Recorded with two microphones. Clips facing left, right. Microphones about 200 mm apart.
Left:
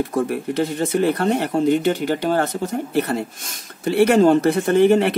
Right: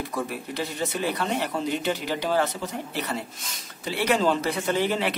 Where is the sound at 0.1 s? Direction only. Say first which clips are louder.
Left 9 dB; 50° left (ahead or behind).